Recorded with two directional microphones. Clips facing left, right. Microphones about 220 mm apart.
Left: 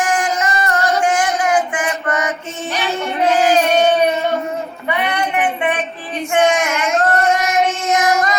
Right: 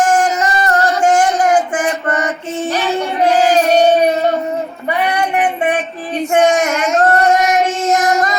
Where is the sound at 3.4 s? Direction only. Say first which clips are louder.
Right 3 dB; 35° right (ahead or behind).